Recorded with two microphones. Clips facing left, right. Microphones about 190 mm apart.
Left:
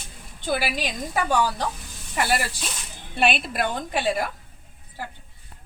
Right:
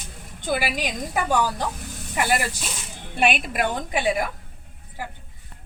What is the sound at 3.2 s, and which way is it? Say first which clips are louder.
A woman's voice: right 1 dB; 15° right (ahead or behind).